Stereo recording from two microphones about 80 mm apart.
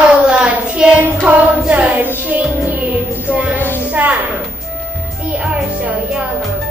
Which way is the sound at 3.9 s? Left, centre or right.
Centre.